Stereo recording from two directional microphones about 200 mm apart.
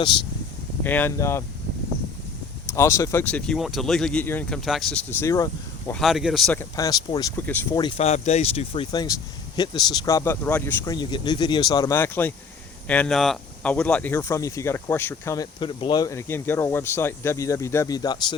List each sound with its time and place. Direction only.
0.9 s speech: 10° left (ahead or behind)
2.7 s speech: 15° left (ahead or behind)
5.2 s speech: 15° left (ahead or behind)
5.9 s speech: centre (ahead or behind)
7.8 s speech: 30° left (ahead or behind)